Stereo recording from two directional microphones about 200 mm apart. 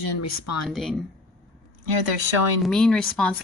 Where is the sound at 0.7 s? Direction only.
Centre (ahead or behind).